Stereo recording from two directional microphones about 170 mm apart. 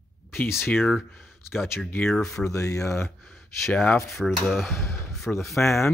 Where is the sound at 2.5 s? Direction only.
20° left (ahead or behind).